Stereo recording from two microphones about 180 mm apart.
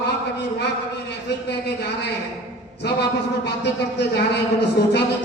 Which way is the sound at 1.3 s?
70° left (ahead or behind).